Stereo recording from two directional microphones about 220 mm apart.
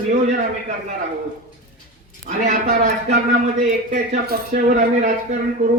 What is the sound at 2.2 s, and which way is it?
A man's voice, 35° right (ahead or behind).